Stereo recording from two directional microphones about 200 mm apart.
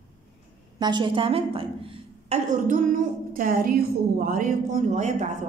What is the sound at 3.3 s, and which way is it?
A woman's voice, 45° right (ahead or behind).